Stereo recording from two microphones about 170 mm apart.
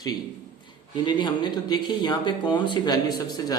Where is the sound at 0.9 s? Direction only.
25° left (ahead or behind).